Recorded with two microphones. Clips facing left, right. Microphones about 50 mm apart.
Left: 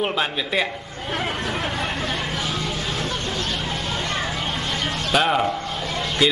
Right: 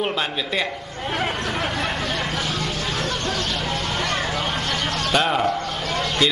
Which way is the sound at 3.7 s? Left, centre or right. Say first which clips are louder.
Right 2 dB; right.